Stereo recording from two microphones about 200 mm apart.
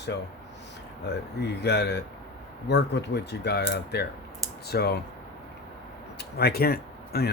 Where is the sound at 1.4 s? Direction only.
55° left (ahead or behind).